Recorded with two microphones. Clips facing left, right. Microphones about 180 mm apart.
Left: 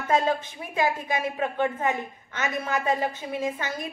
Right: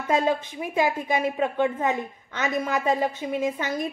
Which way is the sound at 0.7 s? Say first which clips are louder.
Right 2 dB; 15° right (ahead or behind).